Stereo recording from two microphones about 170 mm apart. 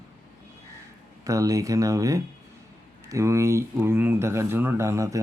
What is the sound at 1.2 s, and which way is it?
Speech, 20° right (ahead or behind).